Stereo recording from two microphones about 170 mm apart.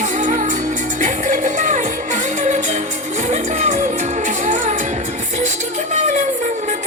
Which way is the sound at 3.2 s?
40° right (ahead or behind).